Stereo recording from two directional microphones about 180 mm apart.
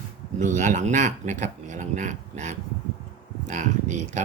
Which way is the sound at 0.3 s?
45° right (ahead or behind).